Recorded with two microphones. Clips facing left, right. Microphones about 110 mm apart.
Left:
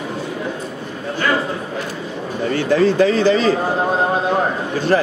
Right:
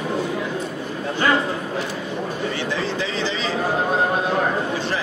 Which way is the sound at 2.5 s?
50° left (ahead or behind).